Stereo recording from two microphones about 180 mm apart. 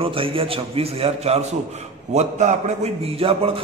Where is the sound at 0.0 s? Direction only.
30° right (ahead or behind).